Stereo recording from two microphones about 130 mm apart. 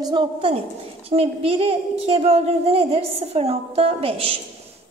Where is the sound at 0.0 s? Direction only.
40° right (ahead or behind).